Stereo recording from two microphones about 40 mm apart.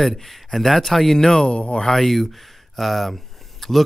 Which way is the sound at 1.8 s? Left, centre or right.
Centre.